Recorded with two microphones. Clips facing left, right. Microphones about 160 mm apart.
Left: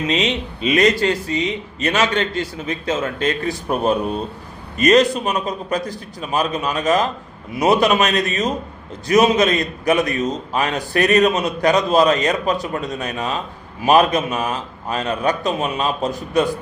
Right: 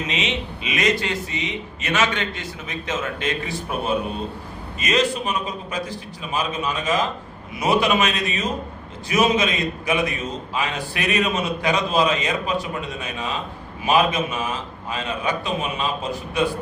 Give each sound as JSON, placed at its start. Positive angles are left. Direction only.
{"t": 0.1, "sound": "a man's voice", "side_deg": 35}